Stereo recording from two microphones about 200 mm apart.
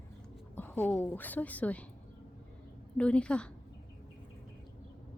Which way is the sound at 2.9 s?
5° left (ahead or behind).